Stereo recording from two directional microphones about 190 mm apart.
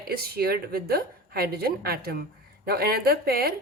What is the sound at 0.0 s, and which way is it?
Speech, 55° right (ahead or behind).